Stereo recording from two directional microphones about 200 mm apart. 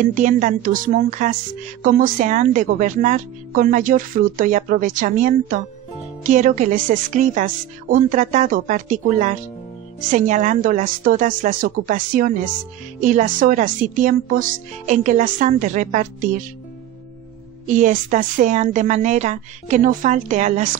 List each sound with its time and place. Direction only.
0.0 s a woman's voice: 40° right (ahead or behind)
17.6 s a woman's voice: 40° right (ahead or behind)